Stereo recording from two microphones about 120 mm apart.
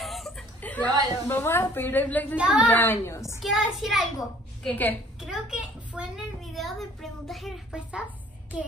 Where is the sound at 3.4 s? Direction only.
Centre (ahead or behind).